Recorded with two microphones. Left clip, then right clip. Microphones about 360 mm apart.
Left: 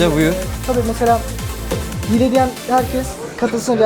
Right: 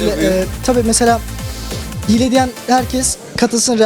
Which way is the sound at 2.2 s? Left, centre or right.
Right.